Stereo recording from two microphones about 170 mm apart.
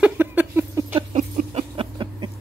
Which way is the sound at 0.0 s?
10° right (ahead or behind).